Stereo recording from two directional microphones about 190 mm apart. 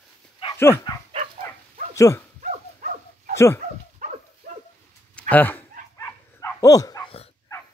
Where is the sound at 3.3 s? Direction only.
15° left (ahead or behind).